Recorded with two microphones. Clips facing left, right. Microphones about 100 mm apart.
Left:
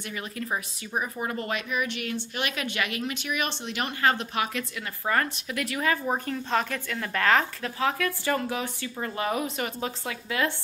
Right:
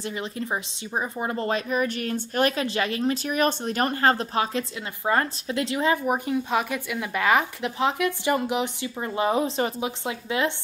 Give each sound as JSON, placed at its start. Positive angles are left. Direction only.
{"t": 0.0, "sound": "speech", "side_deg": -25}